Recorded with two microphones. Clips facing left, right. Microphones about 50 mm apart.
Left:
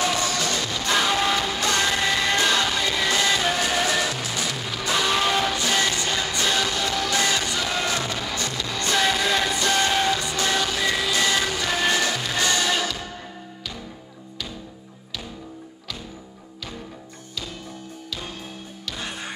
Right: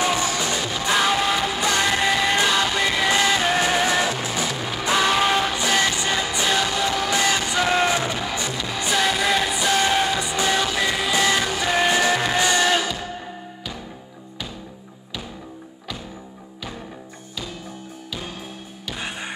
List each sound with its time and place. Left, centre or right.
0.0 s music: right
2.8 s music: right
5.1 s music: centre
18.9 s music: centre